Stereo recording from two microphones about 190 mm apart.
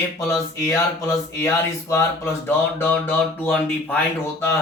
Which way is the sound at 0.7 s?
15° left (ahead or behind).